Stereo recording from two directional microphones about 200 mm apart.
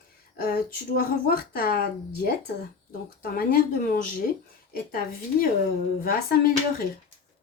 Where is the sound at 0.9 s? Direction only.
45° left (ahead or behind).